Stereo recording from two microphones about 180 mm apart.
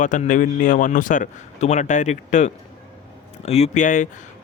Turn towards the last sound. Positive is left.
turn(degrees=45)  # may be behind; listen again after turning